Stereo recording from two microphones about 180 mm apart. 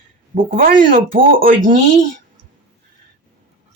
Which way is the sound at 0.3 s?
50° right (ahead or behind).